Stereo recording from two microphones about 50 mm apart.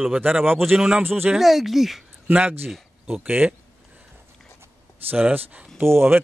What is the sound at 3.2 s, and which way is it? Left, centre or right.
Speech, right.